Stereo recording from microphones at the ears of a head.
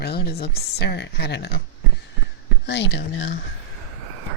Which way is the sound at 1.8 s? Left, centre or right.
Right.